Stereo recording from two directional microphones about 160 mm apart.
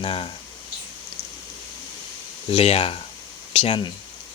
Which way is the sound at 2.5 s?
40° left (ahead or behind).